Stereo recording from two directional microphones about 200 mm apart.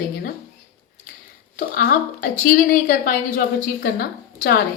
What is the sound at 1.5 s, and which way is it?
A woman's voice, 45° left (ahead or behind).